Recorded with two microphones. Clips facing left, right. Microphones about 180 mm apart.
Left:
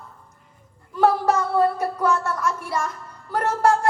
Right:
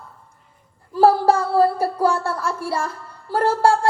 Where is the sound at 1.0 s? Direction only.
30° right (ahead or behind).